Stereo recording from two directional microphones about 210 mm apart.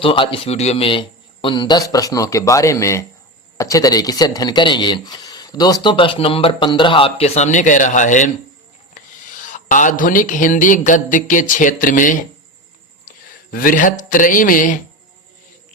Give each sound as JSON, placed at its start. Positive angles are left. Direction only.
{"t": 0.0, "sound": "speech", "side_deg": 25}
{"t": 9.0, "sound": "a sound", "side_deg": 40}
{"t": 13.1, "sound": "speech", "side_deg": 40}